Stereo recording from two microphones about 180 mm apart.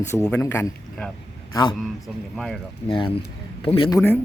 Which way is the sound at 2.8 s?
30° left (ahead or behind).